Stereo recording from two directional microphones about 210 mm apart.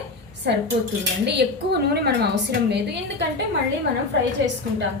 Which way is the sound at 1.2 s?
50° right (ahead or behind).